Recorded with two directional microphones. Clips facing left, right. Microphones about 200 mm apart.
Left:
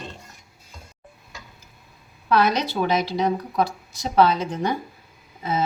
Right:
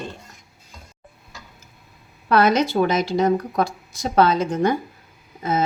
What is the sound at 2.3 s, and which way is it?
Speech, 50° right (ahead or behind).